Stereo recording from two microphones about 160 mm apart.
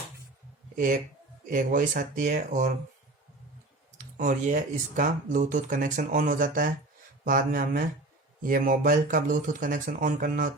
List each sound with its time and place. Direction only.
1.5 s speech: 55° right (ahead or behind)
3.9 s speech: 50° right (ahead or behind)